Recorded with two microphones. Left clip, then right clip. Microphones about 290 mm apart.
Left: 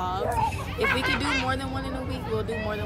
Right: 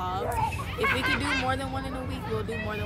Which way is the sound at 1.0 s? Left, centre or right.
Left.